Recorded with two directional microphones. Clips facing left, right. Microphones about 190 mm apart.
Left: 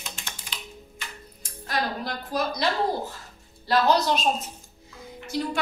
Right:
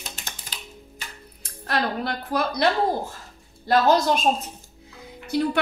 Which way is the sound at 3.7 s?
50° right (ahead or behind).